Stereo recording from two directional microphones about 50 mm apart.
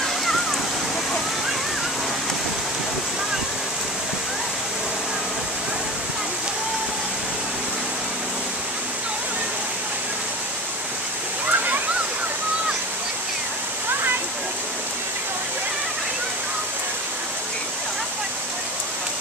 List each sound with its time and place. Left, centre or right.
11.4 s waterfall: right